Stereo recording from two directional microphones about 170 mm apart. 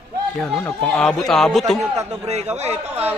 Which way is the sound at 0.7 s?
5° left (ahead or behind).